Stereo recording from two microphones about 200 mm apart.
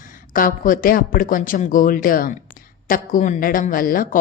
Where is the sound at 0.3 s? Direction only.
45° left (ahead or behind).